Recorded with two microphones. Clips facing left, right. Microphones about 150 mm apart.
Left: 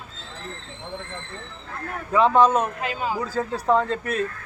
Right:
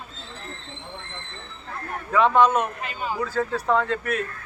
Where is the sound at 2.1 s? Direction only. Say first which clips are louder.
Left 1 dB; 35° left (ahead or behind).